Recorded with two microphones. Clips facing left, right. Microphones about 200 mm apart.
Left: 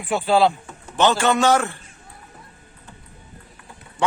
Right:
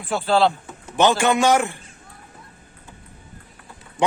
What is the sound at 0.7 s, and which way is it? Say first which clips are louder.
A man's voice: right 1 dB; 10° right (ahead or behind).